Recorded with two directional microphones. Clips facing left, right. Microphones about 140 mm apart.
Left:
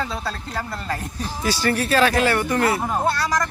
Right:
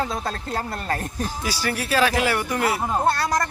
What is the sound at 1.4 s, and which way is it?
Speech, 10° right (ahead or behind).